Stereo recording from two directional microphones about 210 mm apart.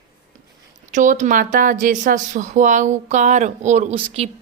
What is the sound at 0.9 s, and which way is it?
Speech, 35° right (ahead or behind).